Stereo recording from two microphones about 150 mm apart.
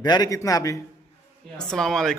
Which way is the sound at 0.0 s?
30° left (ahead or behind).